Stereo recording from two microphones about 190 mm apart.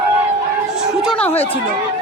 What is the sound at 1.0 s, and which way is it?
Speech, 5° left (ahead or behind).